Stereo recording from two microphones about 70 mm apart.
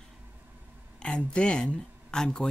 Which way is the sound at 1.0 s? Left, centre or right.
Centre.